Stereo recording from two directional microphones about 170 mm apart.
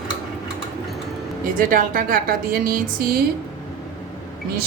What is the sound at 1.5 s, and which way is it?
A woman's voice, 55° right (ahead or behind).